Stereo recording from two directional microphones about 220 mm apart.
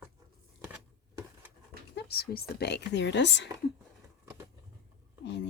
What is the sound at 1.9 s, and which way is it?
Speech, 45° left (ahead or behind).